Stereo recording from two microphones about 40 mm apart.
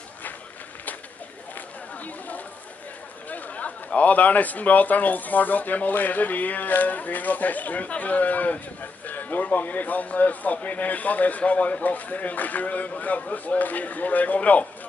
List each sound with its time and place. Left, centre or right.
3.3 s a man's voice: left